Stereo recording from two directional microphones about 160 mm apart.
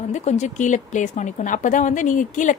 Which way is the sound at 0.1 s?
45° left (ahead or behind).